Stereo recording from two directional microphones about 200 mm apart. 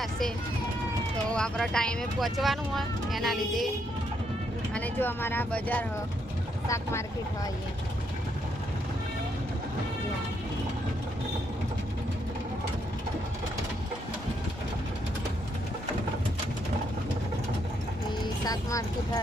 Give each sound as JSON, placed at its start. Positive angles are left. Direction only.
{"t": 0.0, "sound": "speech", "side_deg": 0}
{"t": 4.7, "sound": "speech", "side_deg": 10}
{"t": 18.4, "sound": "speech", "side_deg": 15}